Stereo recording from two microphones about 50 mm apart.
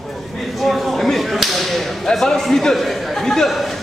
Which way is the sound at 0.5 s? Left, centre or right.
Centre.